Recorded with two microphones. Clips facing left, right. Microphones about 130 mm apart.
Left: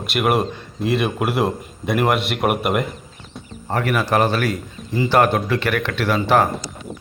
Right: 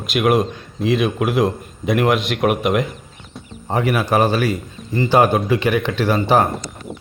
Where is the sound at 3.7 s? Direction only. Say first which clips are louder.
Right 2 dB; 15° right (ahead or behind).